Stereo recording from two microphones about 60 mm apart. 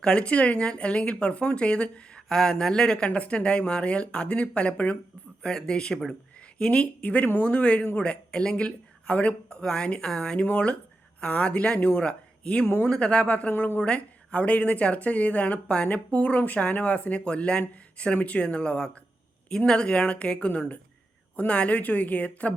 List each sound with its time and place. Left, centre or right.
0.0 s a woman's voice: centre
13.8 s a woman's voice: centre